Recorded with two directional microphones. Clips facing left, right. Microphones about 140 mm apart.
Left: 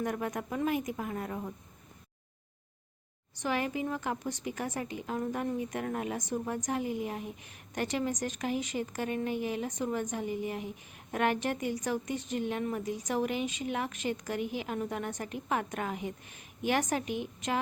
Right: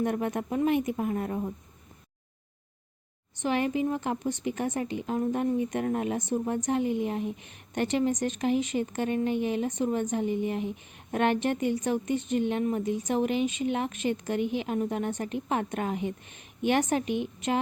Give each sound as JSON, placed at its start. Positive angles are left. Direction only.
{"t": 0.0, "sound": "speech", "side_deg": -25}
{"t": 3.4, "sound": "speech", "side_deg": -25}